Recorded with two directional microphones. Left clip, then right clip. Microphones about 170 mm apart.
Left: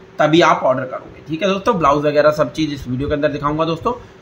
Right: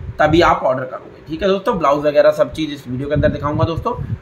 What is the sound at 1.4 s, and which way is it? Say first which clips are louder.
Speech: even; 50° left (ahead or behind).